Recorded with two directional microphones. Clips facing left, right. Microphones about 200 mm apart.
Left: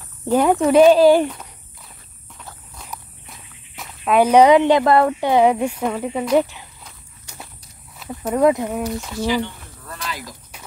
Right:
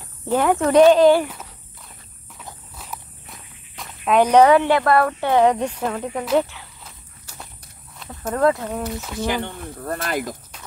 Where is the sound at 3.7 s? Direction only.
5° left (ahead or behind).